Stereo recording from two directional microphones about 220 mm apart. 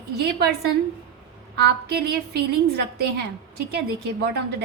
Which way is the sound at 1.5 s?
50° right (ahead or behind).